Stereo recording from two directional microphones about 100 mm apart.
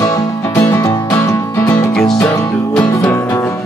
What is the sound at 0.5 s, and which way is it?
Music, 25° left (ahead or behind).